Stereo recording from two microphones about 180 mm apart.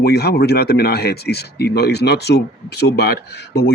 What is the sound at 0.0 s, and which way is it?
Speech, 65° left (ahead or behind).